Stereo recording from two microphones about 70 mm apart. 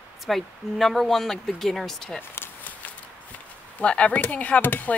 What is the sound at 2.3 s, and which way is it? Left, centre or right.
Walk, left.